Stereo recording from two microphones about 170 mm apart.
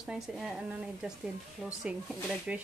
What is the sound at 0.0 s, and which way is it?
A woman's voice, 5° right (ahead or behind).